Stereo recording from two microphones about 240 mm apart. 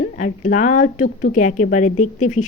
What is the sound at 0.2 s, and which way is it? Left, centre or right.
A woman's voice, left.